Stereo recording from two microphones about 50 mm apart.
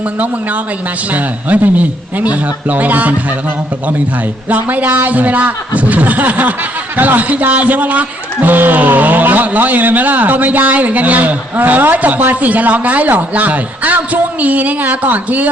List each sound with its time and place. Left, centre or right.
1.1 s a man's voice: right
4.4 s a man's voice: right